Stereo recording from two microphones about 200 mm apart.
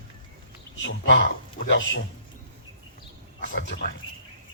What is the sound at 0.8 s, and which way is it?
Speech, 65° left (ahead or behind).